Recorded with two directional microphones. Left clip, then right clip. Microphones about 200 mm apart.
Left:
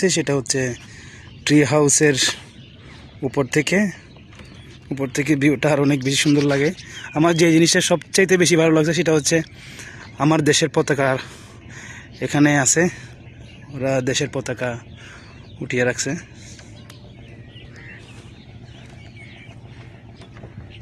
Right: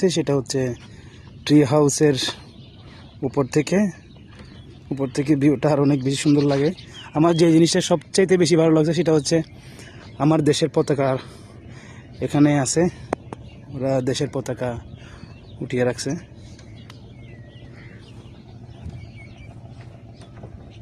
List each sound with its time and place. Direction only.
0.0 s a man's voice: 10° right (ahead or behind)
4.9 s a man's voice: 5° right (ahead or behind)